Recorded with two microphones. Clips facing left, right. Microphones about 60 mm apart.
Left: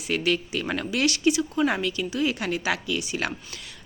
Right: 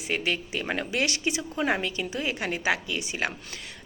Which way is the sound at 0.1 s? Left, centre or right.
Right.